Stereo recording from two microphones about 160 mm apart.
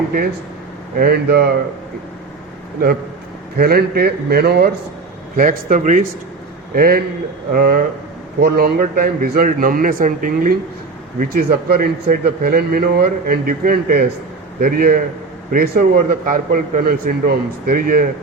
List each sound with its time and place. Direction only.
0.9 s speech: 80° right
3.6 s a man's voice: 70° right (ahead or behind)
5.4 s speech: 55° right (ahead or behind)
6.7 s a man's voice: 65° right (ahead or behind)
11.2 s a man's voice: 75° right (ahead or behind)